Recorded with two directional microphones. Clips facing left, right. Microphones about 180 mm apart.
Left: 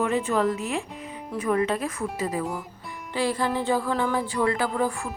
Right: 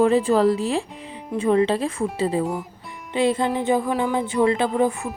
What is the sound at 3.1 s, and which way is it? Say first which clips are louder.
Music: right 5 dB; 20° right (ahead or behind).